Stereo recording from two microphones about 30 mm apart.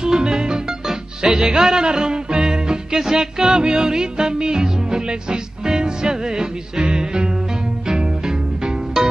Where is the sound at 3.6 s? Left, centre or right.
Right.